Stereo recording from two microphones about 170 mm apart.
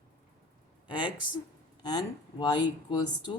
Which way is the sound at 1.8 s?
25° left (ahead or behind).